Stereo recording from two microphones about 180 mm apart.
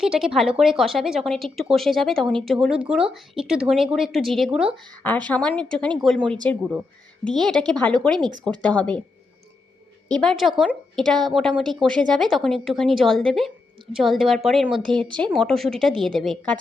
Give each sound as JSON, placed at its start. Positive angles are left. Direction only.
{"t": 0.0, "sound": "speech", "side_deg": -5}
{"t": 5.0, "sound": "speech", "side_deg": 10}
{"t": 6.2, "sound": "speech", "side_deg": -25}
{"t": 7.3, "sound": "speech", "side_deg": 0}
{"t": 10.1, "sound": "speech", "side_deg": 5}